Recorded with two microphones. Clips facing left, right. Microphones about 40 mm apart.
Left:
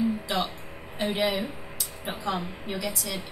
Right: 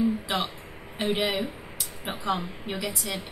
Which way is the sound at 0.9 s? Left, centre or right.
Right.